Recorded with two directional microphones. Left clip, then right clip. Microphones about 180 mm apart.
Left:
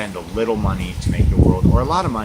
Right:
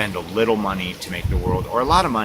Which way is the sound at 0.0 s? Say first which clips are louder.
Right 2 dB; 5° right (ahead or behind).